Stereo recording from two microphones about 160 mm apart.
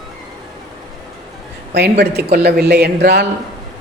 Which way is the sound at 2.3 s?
80° right.